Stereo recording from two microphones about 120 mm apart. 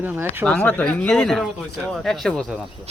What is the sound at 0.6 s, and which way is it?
Speech, 10° left (ahead or behind).